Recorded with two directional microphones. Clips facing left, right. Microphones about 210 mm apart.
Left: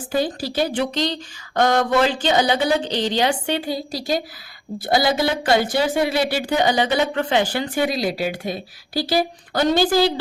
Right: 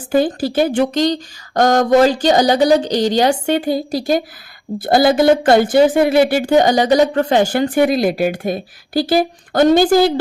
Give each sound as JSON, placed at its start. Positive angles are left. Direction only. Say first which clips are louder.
{"t": 0.1, "sound": "a woman's voice", "louder": "right 7 dB", "side_deg": -50}